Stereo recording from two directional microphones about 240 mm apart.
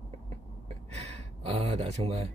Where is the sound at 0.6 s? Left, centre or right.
Right.